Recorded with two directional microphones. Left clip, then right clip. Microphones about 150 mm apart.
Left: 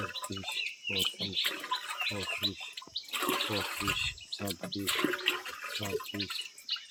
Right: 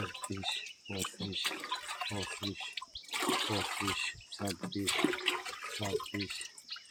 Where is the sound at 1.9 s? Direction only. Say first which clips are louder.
Left 5 dB; 15° right (ahead or behind).